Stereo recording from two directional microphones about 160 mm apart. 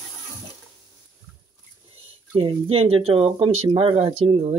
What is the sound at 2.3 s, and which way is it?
Speech, 35° right (ahead or behind).